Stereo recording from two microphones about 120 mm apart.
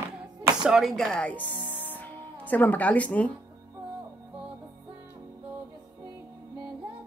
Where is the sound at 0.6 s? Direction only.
Centre (ahead or behind).